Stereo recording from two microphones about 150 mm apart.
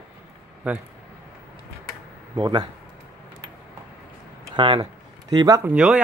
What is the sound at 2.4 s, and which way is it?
Speech, 30° right (ahead or behind).